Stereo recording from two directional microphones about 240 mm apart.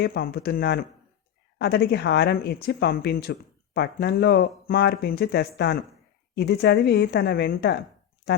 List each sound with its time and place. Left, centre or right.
0.0 s speech: left